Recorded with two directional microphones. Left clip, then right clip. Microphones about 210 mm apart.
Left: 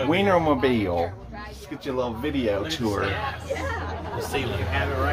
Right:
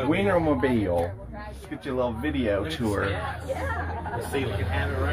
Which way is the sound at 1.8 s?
15° right (ahead or behind).